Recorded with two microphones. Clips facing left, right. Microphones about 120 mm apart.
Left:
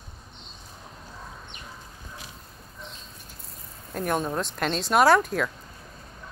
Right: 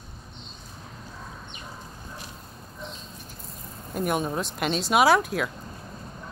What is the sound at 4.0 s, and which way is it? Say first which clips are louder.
Speech: even; 10° right (ahead or behind).